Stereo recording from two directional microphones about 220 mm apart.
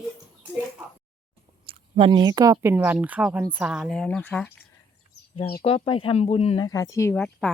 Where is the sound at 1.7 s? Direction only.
25° right (ahead or behind); by 4.5 s 5° left (ahead or behind).